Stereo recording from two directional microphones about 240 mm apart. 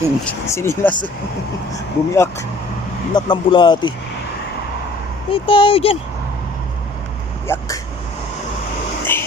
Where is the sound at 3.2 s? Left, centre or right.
Centre.